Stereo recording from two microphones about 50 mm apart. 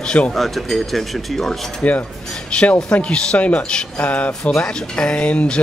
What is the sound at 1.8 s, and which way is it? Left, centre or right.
Speech, left.